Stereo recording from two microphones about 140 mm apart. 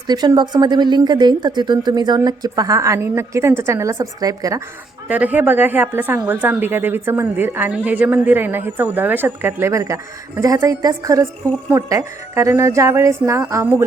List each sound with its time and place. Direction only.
0.1 s speech: 30° right (ahead or behind)
5.0 s a woman's voice: 10° right (ahead or behind)